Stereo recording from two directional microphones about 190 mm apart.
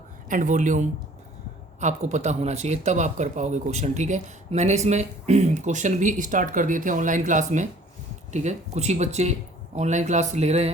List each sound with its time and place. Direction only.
0.3 s speech: 40° right (ahead or behind)